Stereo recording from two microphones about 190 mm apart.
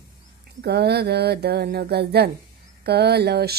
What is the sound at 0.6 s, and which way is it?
Speech, 60° right (ahead or behind).